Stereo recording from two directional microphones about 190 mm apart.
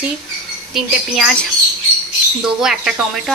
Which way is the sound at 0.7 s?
Centre (ahead or behind).